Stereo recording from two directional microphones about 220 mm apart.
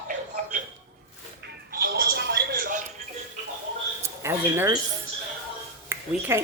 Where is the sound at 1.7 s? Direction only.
45° right (ahead or behind).